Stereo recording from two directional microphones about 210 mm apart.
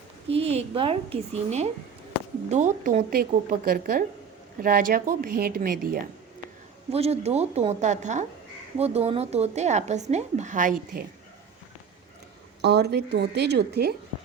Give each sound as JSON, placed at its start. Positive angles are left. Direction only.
{"t": 0.3, "sound": "a woman's voice", "side_deg": -30}
{"t": 6.9, "sound": "speech", "side_deg": -30}
{"t": 12.6, "sound": "a woman's voice", "side_deg": -50}